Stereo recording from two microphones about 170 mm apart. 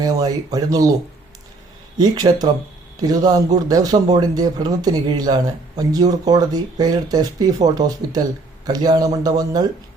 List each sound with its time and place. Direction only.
0.0 s speech: 20° right (ahead or behind)
2.0 s speech: 25° right (ahead or behind)